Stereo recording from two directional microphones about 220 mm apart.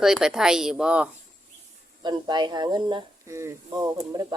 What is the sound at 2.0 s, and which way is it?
Speech, 20° right (ahead or behind).